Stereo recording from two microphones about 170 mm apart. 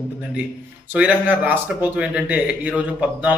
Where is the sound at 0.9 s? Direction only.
10° right (ahead or behind).